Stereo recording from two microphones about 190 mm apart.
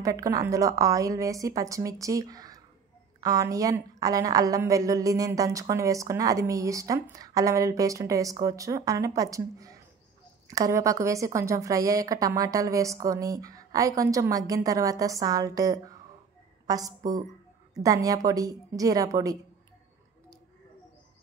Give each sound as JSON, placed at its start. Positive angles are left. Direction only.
{"t": 0.0, "sound": "a woman's voice", "side_deg": -20}